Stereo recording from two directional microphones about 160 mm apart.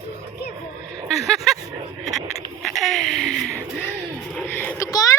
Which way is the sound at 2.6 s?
Centre (ahead or behind).